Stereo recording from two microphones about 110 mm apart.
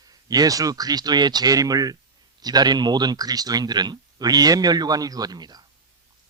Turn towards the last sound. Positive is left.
turn(degrees=-40)  # may be behind; listen again after turning